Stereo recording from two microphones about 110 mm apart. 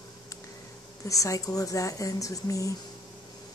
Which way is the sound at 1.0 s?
30° left (ahead or behind).